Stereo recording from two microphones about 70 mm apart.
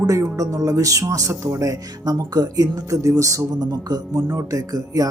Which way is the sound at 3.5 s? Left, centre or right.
Right.